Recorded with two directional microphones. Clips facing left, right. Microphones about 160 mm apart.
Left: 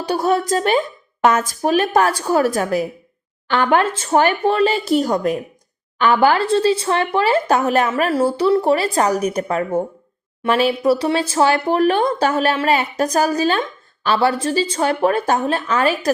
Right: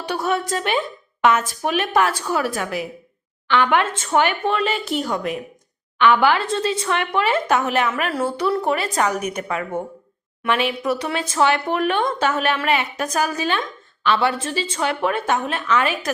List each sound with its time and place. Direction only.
0.0 s speech: 35° left (ahead or behind)